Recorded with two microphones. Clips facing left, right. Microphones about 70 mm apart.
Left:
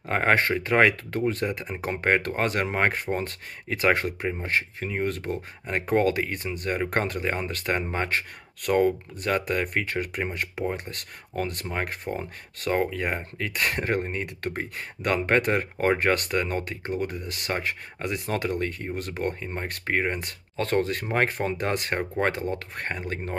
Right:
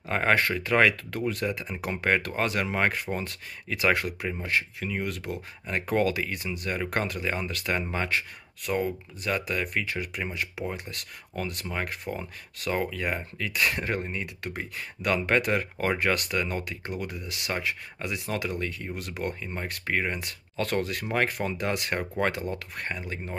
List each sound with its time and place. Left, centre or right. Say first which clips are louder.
0.1 s speech: left 2 dB; left